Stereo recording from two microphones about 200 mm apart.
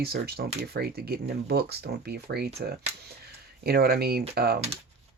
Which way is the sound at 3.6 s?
50° right (ahead or behind).